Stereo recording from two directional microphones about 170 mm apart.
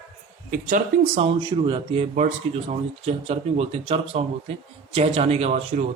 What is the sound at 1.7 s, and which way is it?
Speech, 30° right (ahead or behind).